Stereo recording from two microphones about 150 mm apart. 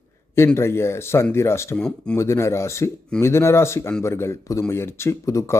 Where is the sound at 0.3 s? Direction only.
20° left (ahead or behind).